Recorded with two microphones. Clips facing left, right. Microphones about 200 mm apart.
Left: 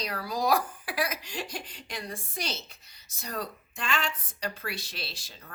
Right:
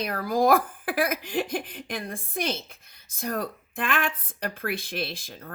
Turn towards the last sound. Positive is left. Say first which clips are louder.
# right 7 dB
turn(degrees=-55)  # may be behind; listen again after turning